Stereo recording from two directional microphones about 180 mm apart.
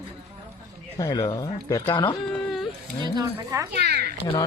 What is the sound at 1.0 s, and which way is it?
Speech, 25° left (ahead or behind).